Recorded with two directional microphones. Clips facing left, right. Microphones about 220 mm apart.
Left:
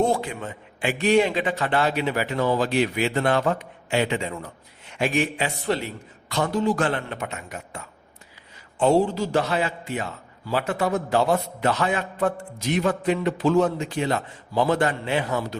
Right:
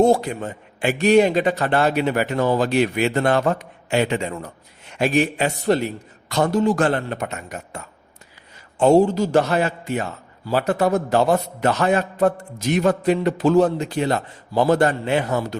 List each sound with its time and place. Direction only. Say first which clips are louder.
0.0 s a man's voice: right 6 dB; 40° right (ahead or behind)
8.8 s a man's voice: right 5 dB; 45° right (ahead or behind)